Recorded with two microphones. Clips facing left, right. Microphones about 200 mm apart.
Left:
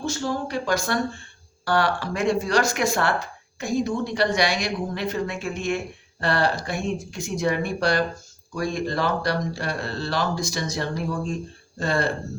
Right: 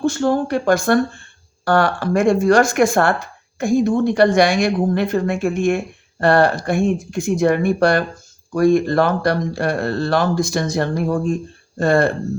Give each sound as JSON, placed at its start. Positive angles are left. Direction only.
{"t": 0.0, "sound": "a woman's voice", "side_deg": -55}